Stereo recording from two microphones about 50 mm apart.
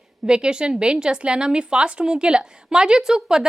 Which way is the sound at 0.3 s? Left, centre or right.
Centre.